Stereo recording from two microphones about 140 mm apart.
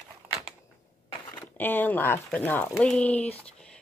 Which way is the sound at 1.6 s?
15° left (ahead or behind).